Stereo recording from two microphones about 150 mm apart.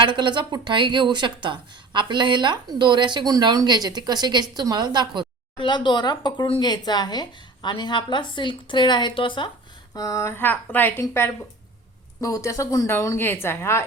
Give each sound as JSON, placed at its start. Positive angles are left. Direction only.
{"t": 0.0, "sound": "speech", "side_deg": -30}
{"t": 5.5, "sound": "speech", "side_deg": 30}
{"t": 9.9, "sound": "a woman's voice", "side_deg": 25}